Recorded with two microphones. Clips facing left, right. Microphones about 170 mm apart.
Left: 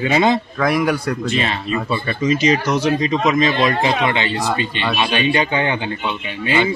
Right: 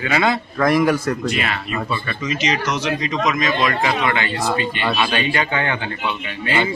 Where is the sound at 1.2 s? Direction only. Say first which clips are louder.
Left 2 dB; 25° left (ahead or behind).